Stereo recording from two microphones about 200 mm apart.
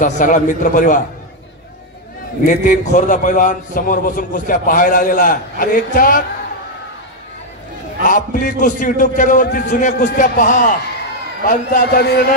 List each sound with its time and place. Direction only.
0.0 s a man's voice: 40° left (ahead or behind)
2.4 s a man's voice: 40° left (ahead or behind)
8.1 s a man's voice: 40° left (ahead or behind)